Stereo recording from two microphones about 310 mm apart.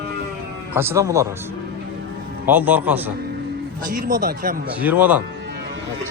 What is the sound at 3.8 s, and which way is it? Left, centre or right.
Speech, right.